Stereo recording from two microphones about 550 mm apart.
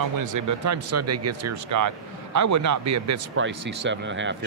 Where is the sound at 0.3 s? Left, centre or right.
Right.